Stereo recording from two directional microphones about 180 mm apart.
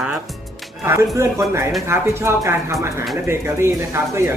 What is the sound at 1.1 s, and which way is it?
Speech, 15° right (ahead or behind).